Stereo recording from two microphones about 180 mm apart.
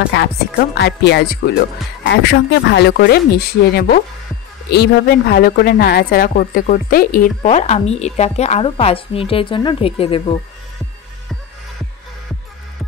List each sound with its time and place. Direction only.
0.1 s speech: 70° left (ahead or behind)
2.0 s a woman's voice: 75° left (ahead or behind); by 7.2 s 55° left (ahead or behind)
7.4 s a woman's voice: 35° left (ahead or behind)